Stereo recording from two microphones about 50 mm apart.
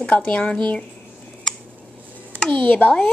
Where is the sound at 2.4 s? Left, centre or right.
Centre.